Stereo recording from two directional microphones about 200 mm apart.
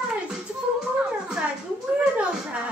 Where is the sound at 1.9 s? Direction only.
5° right (ahead or behind).